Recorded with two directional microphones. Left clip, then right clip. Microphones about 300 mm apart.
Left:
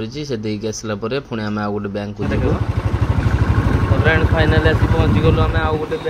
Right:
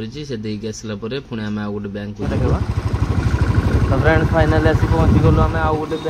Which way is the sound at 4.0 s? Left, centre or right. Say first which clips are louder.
Right 1 dB; right.